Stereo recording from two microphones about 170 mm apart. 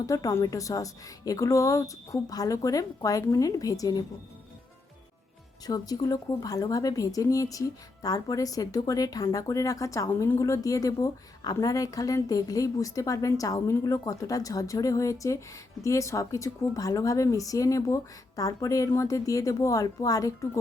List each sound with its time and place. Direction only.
0.0 s a woman's voice: 20° left (ahead or behind)
5.6 s a woman's voice: 20° left (ahead or behind)